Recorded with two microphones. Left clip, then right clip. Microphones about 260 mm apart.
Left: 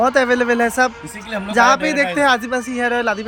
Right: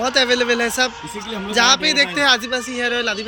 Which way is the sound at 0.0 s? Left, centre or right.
Centre.